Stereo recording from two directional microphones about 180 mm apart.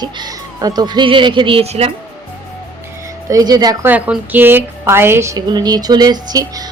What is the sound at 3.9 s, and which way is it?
A woman's voice, 10° right (ahead or behind).